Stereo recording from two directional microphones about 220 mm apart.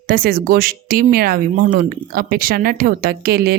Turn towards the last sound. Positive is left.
turn(degrees=-45)  # may be behind; listen again after turning